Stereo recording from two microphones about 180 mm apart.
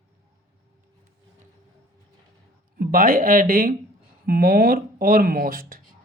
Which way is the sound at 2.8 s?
50° right (ahead or behind).